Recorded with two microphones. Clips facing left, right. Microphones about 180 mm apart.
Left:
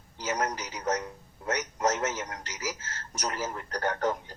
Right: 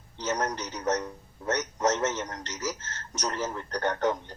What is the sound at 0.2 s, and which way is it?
A man's voice, 10° left (ahead or behind).